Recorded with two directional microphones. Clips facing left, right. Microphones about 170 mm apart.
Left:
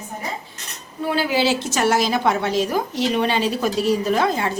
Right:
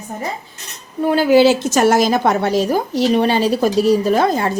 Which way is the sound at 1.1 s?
50° right (ahead or behind).